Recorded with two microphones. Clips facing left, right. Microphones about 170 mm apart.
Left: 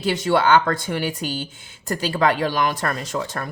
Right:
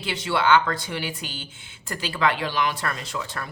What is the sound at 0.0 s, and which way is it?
A woman's voice, 45° left (ahead or behind).